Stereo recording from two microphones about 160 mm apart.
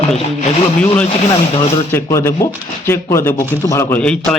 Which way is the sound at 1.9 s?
15° left (ahead or behind).